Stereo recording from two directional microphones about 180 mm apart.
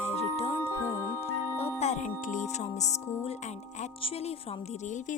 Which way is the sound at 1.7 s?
40° left (ahead or behind).